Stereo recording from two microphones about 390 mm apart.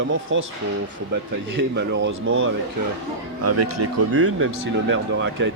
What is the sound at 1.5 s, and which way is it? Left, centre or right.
Speech, right.